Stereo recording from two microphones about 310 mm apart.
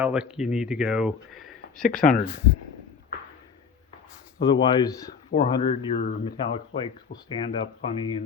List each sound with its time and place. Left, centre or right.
0.0 s speech: centre
1.9 s speech: left
4.4 s speech: centre
6.0 s speech: left
6.4 s speech: centre